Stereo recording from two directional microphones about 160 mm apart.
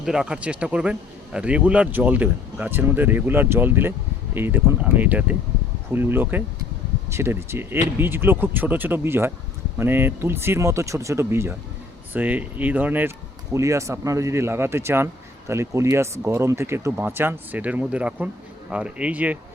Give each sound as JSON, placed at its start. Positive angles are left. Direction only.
{"t": 0.0, "sound": "speech", "side_deg": -5}